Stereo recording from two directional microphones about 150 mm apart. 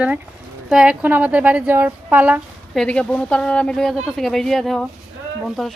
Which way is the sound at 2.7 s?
5° left (ahead or behind).